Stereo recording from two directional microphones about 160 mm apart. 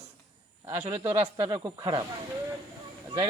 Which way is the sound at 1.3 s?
35° right (ahead or behind).